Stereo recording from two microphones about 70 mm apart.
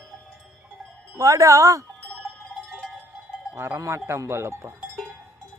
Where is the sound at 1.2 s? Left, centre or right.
Right.